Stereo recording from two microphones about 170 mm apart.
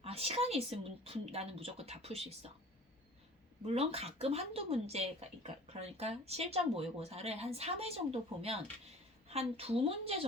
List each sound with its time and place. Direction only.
0.0 s speech: 35° right (ahead or behind)
3.7 s speech: 35° right (ahead or behind)